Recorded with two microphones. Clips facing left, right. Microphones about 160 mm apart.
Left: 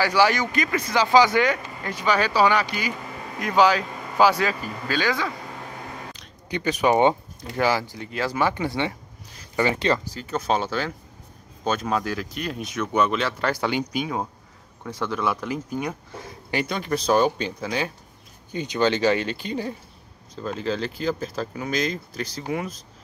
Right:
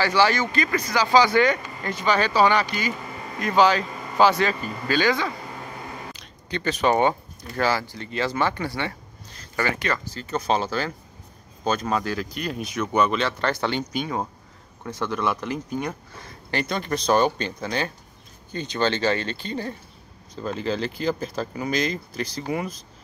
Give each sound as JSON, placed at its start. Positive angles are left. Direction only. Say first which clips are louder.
{"t": 0.0, "sound": "speech", "louder": "even", "side_deg": 10}
{"t": 1.5, "sound": "speech", "louder": "right 1 dB", "side_deg": 5}
{"t": 6.5, "sound": "speech", "louder": "left 1 dB", "side_deg": 10}
{"t": 10.1, "sound": "speech", "louder": "even", "side_deg": 5}
{"t": 20.3, "sound": "speech", "louder": "even", "side_deg": 0}